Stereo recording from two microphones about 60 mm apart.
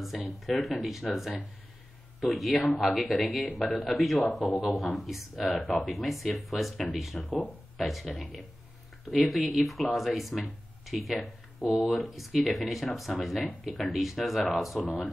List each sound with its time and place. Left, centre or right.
0.0 s speech: centre